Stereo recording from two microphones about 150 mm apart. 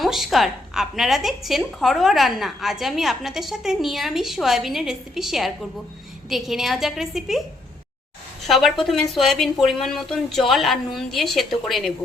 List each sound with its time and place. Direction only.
0.0 s a woman's voice: centre (ahead or behind)
8.4 s a woman's voice: centre (ahead or behind)